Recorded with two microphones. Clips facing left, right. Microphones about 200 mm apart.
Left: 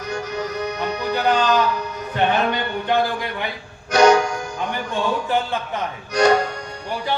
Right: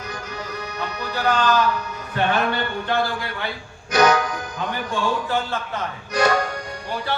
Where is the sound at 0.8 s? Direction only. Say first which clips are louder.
Left 3 dB; 15° left (ahead or behind).